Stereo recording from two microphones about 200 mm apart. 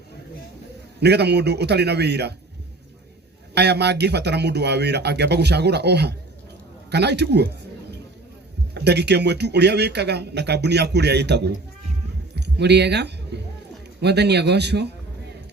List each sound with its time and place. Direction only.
0.9 s speech: 55° right (ahead or behind)
3.5 s a man's voice: 55° right (ahead or behind)